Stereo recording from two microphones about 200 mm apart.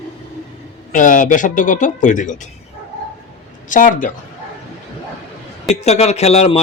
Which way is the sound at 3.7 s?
40° left (ahead or behind).